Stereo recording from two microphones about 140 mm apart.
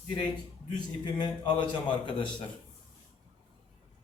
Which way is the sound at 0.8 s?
30° left (ahead or behind).